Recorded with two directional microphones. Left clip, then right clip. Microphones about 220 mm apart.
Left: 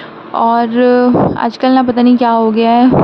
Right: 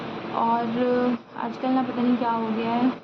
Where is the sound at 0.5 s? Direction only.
40° left (ahead or behind).